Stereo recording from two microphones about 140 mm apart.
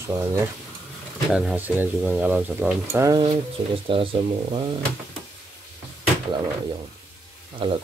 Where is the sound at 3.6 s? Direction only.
30° right (ahead or behind).